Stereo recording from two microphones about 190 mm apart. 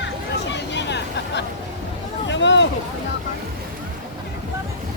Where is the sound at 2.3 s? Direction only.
70° left (ahead or behind).